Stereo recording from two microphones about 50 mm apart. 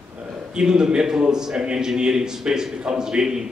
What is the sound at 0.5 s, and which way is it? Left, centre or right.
A man's voice, centre.